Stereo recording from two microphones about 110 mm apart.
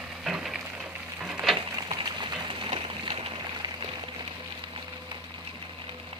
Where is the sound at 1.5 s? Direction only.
50° right (ahead or behind).